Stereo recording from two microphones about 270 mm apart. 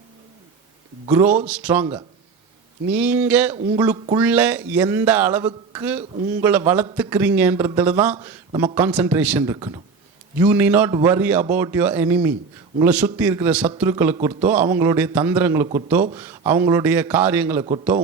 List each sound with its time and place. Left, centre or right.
1.0 s a man's voice: centre
2.9 s a man's voice: centre
3.5 s a man's voice: centre
4.2 s a man's voice: centre